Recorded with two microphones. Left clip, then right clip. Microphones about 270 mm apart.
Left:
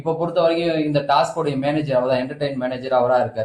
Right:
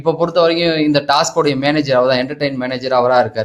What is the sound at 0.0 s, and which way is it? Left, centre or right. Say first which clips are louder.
Speech: right 5 dB; right.